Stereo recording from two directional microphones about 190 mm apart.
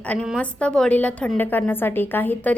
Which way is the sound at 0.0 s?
5° left (ahead or behind).